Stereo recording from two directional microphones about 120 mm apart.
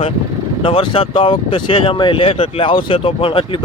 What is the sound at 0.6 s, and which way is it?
Speech, 45° left (ahead or behind).